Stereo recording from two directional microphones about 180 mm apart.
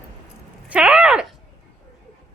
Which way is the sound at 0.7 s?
5° right (ahead or behind).